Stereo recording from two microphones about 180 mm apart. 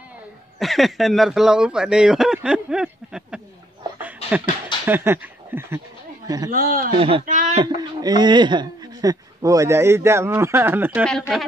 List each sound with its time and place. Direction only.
0.6 s speech: centre (ahead or behind)
4.8 s speech: 10° right (ahead or behind)
6.5 s a man's voice: 50° right (ahead or behind)
7.0 s speech: 30° right (ahead or behind)
7.2 s a man's voice: 40° right (ahead or behind)
7.6 s a man's voice: 25° right (ahead or behind)
11.1 s speech: centre (ahead or behind)